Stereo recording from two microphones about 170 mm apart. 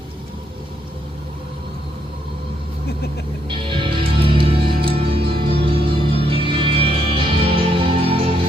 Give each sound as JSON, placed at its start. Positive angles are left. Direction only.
{"t": 3.5, "sound": "music", "side_deg": -30}